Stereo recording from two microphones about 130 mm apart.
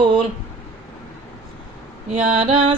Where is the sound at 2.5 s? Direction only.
40° right (ahead or behind).